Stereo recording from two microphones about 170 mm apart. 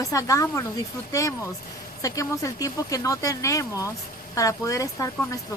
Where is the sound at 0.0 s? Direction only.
20° left (ahead or behind).